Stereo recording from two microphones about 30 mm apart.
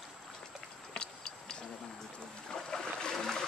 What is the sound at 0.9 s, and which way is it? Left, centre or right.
Tick-tock, left.